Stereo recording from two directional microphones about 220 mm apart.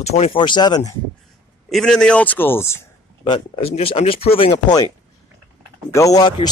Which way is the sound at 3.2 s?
25° left (ahead or behind).